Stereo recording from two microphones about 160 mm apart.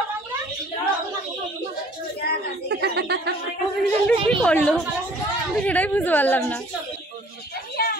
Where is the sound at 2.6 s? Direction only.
90° right.